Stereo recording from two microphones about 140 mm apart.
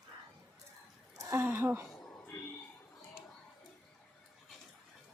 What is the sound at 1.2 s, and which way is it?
Speech, 20° right (ahead or behind).